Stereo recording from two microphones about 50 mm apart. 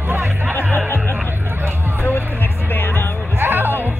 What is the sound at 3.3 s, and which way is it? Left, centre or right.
Music, right.